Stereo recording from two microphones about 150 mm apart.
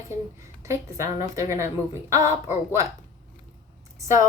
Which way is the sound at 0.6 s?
20° right (ahead or behind).